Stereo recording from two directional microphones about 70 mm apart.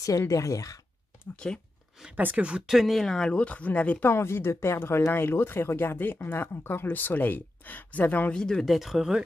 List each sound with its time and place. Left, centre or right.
0.3 s speech: left
1.3 s speech: centre
2.1 s speech: right; by 4.1 s left
4.1 s speech: left
8.3 s speech: centre